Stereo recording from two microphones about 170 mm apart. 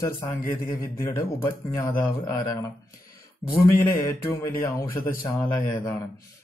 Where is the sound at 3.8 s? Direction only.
15° left (ahead or behind).